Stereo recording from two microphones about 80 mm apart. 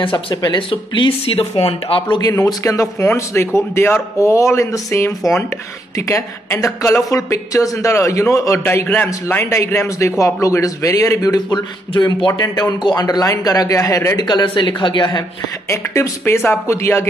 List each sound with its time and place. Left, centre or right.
0.3 s speech: left
2.0 s speech: left
2.2 s a man's voice: left
7.0 s a man's voice: left
8.6 s a man's voice: left
12.4 s a man's voice: left
14.2 s speech: left
15.7 s a man's voice: left